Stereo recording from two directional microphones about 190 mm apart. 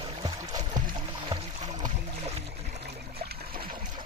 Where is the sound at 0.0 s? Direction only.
20° right (ahead or behind).